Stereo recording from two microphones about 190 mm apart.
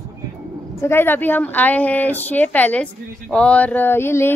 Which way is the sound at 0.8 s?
10° left (ahead or behind).